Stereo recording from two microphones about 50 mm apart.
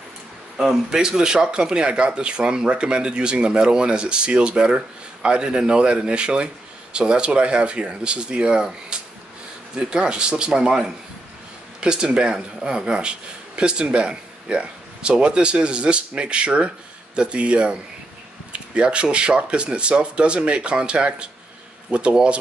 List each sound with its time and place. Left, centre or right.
0.6 s speech: centre